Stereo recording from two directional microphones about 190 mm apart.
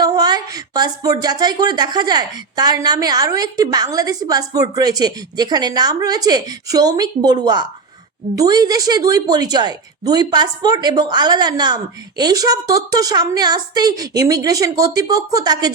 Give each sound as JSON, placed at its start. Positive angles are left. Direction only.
{"t": 0.0, "sound": "speech", "side_deg": -20}